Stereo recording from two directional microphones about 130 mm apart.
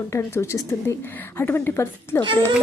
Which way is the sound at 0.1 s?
20° left (ahead or behind).